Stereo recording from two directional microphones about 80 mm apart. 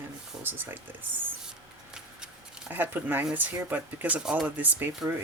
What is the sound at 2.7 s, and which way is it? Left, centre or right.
Speech, right.